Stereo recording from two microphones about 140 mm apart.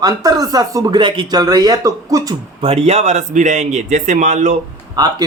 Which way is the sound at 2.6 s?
45° right (ahead or behind).